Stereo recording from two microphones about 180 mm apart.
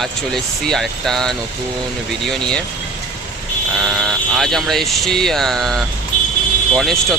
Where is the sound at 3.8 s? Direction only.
Centre (ahead or behind).